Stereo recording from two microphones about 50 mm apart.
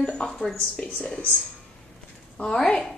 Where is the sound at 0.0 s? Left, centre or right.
Centre.